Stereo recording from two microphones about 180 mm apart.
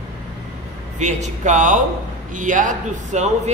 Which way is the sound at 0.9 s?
40° right (ahead or behind).